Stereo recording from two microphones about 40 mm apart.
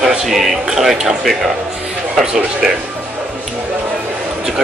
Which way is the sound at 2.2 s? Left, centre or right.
Centre.